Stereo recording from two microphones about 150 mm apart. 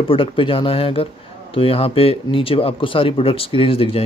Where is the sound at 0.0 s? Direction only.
35° left (ahead or behind).